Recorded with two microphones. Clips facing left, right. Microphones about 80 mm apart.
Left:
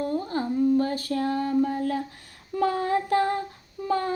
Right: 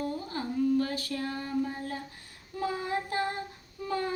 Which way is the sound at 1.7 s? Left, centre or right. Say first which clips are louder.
Left 10 dB; left.